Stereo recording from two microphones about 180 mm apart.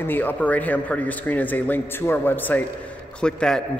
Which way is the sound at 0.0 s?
10° left (ahead or behind).